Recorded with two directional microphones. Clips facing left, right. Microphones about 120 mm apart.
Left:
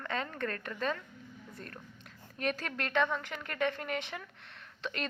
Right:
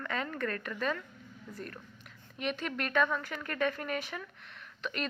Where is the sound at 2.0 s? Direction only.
40° left (ahead or behind).